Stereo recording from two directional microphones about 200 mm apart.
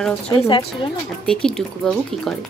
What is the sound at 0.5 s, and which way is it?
Speech, 25° left (ahead or behind).